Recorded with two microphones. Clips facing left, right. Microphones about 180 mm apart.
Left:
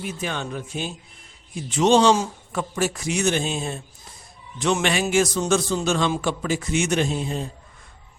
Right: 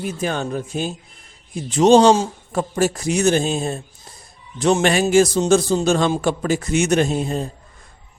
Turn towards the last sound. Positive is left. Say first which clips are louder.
# right 4 dB
turn(degrees=-40)  # may be behind; listen again after turning